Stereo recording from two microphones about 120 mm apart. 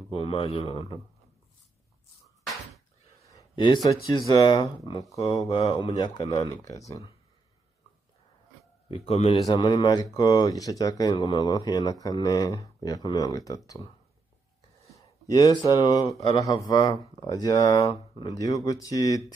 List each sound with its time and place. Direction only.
0.1 s a man's voice: 50° left (ahead or behind)
3.5 s a man's voice: 40° left (ahead or behind)
8.9 s a man's voice: 55° left (ahead or behind)
9.5 s speech: 40° left (ahead or behind)
15.2 s speech: 30° left (ahead or behind)